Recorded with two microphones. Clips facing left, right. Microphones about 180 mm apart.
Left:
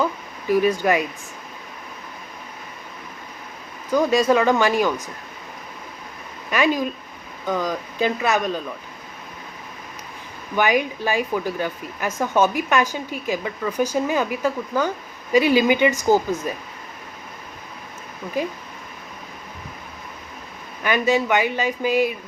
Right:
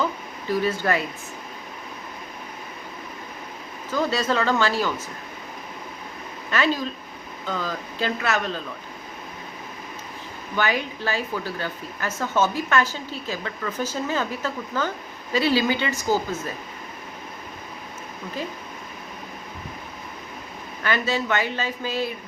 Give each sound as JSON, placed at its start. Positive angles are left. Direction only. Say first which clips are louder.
{"t": 0.4, "sound": "speech", "louder": "left 5 dB", "side_deg": 15}
{"t": 3.9, "sound": "speech", "louder": "left 6 dB", "side_deg": 15}
{"t": 6.5, "sound": "speech", "louder": "left 3 dB", "side_deg": 15}
{"t": 10.5, "sound": "speech", "louder": "left 5 dB", "side_deg": 15}
{"t": 20.8, "sound": "speech", "louder": "left 5 dB", "side_deg": 15}